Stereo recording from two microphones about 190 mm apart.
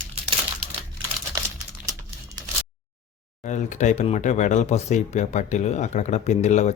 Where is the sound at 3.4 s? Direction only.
40° left (ahead or behind).